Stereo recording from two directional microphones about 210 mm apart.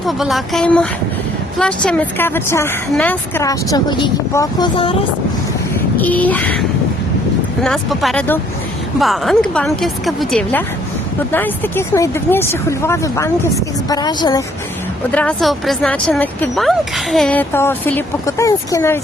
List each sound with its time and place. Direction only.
0.0 s speech: centre (ahead or behind); by 4.9 s 25° left (ahead or behind)
5.7 s speech: 10° left (ahead or behind)
7.6 s speech: centre (ahead or behind); by 14.4 s 20° left (ahead or behind)
15.1 s speech: 5° left (ahead or behind)